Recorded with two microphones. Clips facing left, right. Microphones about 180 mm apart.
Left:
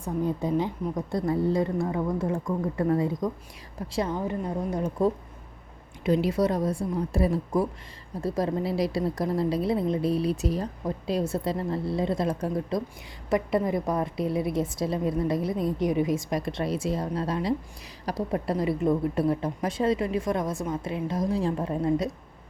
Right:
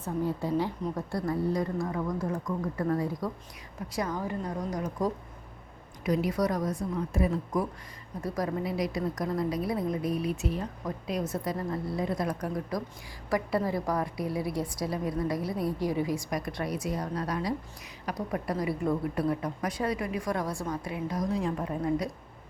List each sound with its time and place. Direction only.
0.0 s a woman's voice: 20° left (ahead or behind)